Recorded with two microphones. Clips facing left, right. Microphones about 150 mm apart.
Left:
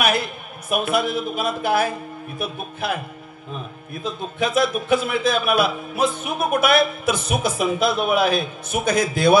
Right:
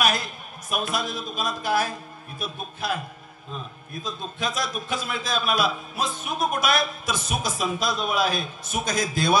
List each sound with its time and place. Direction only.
0.0 s a man's voice: 55° left (ahead or behind)
4.4 s a man's voice: 55° left (ahead or behind)